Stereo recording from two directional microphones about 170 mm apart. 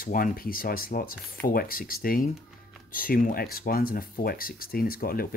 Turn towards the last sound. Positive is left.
turn(degrees=60)  # may be behind; listen again after turning